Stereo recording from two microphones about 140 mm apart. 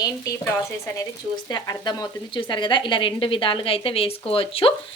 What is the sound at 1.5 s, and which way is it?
A woman's voice, 30° left (ahead or behind).